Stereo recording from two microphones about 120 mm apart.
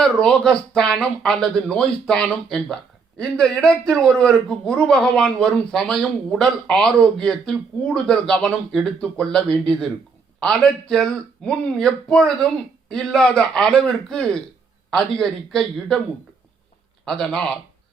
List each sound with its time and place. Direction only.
0.0 s a man's voice: 5° left (ahead or behind)
17.1 s a man's voice: 5° left (ahead or behind)